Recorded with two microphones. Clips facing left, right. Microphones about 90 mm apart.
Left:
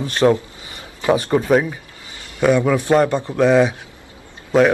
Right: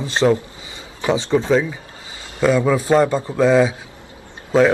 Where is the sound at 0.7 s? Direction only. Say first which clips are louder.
Right 1 dB; 20° right (ahead or behind).